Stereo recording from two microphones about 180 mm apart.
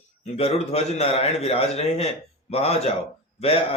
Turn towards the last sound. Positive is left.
turn(degrees=35)  # may be behind; listen again after turning